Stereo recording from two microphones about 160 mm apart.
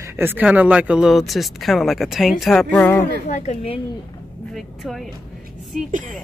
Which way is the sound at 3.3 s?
45° left (ahead or behind).